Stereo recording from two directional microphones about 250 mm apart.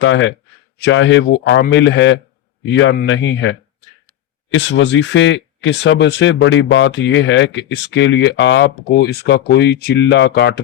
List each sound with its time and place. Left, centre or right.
0.0 s speech: left